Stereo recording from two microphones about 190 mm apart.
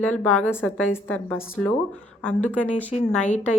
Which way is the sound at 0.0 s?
10° left (ahead or behind).